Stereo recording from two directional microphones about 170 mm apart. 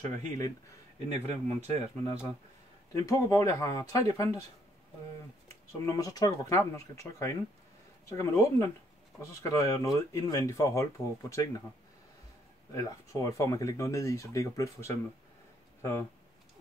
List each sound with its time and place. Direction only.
0.9 s speech: 40° right (ahead or behind)
2.9 s speech: 20° left (ahead or behind)
5.9 s speech: 20° left (ahead or behind)
12.7 s speech: 20° left (ahead or behind)